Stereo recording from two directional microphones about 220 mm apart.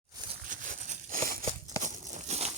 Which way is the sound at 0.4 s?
35° right (ahead or behind).